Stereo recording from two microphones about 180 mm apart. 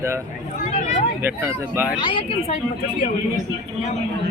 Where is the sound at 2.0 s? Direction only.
30° left (ahead or behind).